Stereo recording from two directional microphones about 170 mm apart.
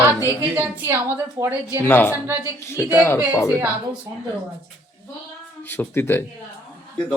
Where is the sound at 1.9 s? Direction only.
10° left (ahead or behind).